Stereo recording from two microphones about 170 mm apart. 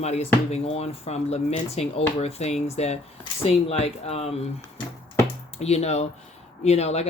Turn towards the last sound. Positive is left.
turn(degrees=40)  # may be behind; listen again after turning